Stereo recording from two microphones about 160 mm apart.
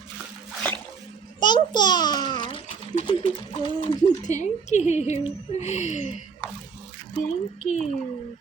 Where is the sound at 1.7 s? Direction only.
25° left (ahead or behind).